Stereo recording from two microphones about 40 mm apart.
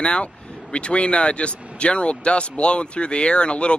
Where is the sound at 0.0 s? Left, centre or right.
Left.